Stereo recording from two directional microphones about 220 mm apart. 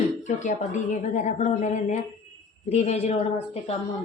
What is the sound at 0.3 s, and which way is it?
A woman's voice, 30° left (ahead or behind).